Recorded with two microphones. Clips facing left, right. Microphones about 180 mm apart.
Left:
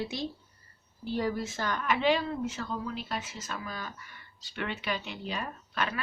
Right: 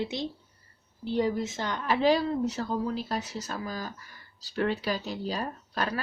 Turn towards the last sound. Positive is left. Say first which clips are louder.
# right 2 dB
turn(degrees=-35)  # may be behind; listen again after turning